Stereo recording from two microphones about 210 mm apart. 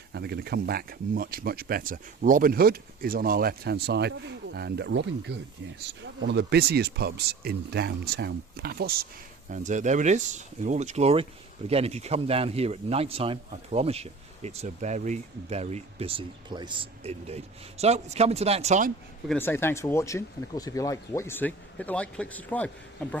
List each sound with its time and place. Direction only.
0.1 s speech: 50° right (ahead or behind)
9.5 s a man's voice: 35° right (ahead or behind)
19.3 s speech: 10° left (ahead or behind)